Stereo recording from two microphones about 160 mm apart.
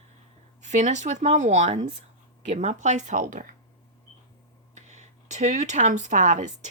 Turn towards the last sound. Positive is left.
turn(degrees=-50)  # may be behind; listen again after turning